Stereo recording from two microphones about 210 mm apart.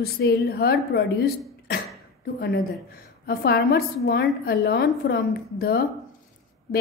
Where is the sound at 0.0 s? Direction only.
50° left (ahead or behind).